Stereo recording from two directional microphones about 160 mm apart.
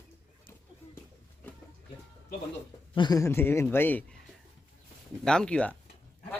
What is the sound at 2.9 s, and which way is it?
A man's voice, 25° left (ahead or behind).